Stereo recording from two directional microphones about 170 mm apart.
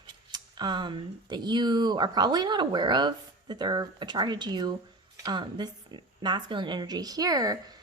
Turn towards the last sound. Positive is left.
turn(degrees=-20)  # may be behind; listen again after turning